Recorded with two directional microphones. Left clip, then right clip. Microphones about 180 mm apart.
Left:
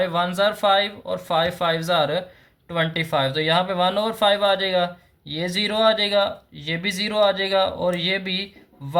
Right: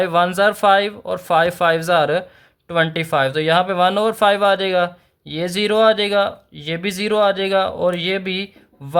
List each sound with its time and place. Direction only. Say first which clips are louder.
0.0 s speech: right 5 dB; 50° right (ahead or behind)